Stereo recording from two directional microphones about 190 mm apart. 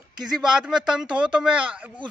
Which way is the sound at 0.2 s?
Centre (ahead or behind).